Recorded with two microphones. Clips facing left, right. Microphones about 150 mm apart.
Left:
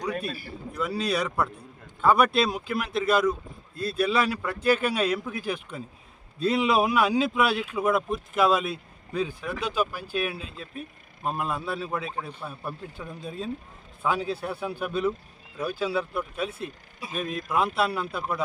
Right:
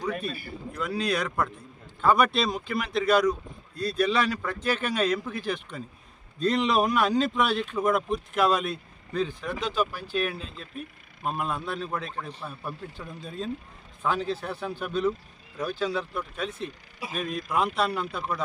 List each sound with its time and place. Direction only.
0.7 s speech: 5° left (ahead or behind)